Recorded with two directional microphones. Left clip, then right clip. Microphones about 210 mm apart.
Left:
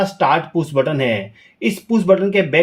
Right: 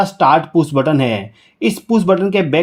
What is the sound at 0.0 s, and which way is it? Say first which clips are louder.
Speech: right 4 dB; 50° right (ahead or behind).